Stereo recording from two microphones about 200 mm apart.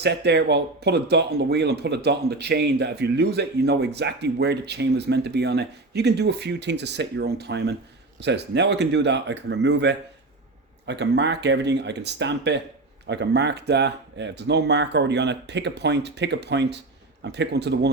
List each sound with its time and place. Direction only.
0.0 s speech: 60° right (ahead or behind)